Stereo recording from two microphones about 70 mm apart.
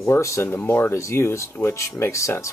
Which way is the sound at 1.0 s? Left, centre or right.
Left.